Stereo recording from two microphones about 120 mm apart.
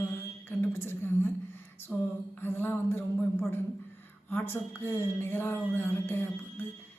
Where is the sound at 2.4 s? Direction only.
15° left (ahead or behind).